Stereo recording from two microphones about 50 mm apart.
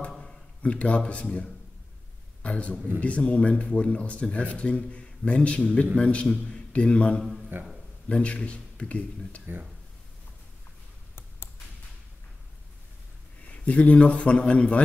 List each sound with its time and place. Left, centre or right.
0.6 s speech: left
7.2 s a man's voice: centre
8.1 s speech: left
13.5 s speech: left